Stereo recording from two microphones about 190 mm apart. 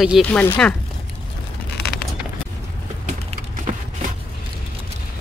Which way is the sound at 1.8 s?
60° left (ahead or behind).